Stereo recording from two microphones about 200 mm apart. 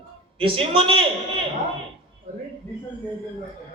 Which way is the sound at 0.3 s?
25° right (ahead or behind).